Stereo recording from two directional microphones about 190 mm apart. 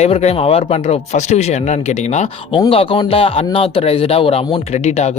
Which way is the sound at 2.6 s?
25° left (ahead or behind).